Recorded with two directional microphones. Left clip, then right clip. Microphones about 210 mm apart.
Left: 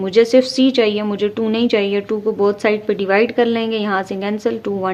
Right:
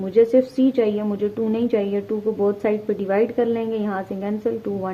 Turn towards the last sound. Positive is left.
turn(degrees=25)  # may be behind; listen again after turning